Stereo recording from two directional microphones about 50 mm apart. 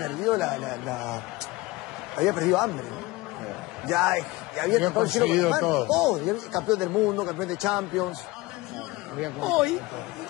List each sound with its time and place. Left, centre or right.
0.0 s speech: centre
2.2 s speech: centre
4.6 s speech: centre
9.2 s speech: centre